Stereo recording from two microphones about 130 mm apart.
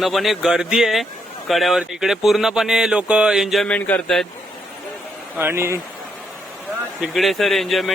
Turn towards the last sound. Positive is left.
turn(degrees=0)  # may be behind; listen again after turning